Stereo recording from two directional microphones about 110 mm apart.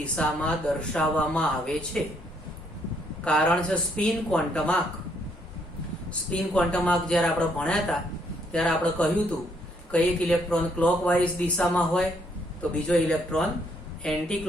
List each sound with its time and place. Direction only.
0.2 s speech: 10° left (ahead or behind)
3.2 s speech: 5° left (ahead or behind)
6.1 s speech: 10° left (ahead or behind)